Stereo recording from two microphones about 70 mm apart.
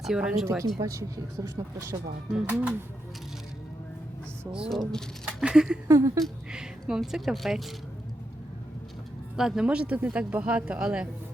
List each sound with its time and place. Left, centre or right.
0.2 s speech: centre
0.4 s speech: right
2.3 s speech: right
4.7 s speech: centre
5.4 s speech: centre
5.9 s speech: right
6.5 s speech: centre
9.3 s speech: centre
9.6 s speech: centre